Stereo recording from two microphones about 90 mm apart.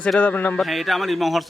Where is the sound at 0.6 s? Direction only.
Centre (ahead or behind).